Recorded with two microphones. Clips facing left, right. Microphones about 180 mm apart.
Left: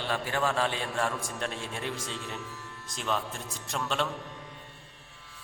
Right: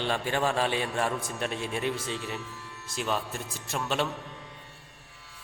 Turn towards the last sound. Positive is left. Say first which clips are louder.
# right 2 dB
turn(degrees=-10)  # may be behind; listen again after turning